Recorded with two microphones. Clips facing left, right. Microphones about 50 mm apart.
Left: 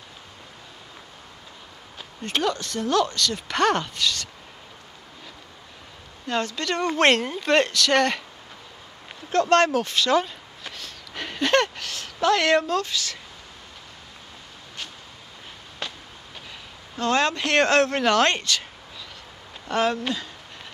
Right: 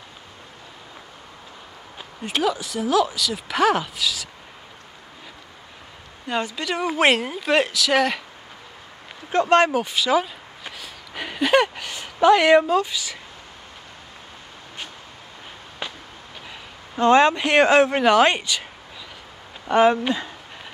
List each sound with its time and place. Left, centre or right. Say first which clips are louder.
2.0 s speech: right 2 dB; centre
6.2 s speech: right 1 dB; centre
9.3 s a sound: right 2 dB; centre
15.8 s a sound: right 1 dB; centre
16.9 s speech: right 7 dB; right
19.7 s speech: right 6 dB; centre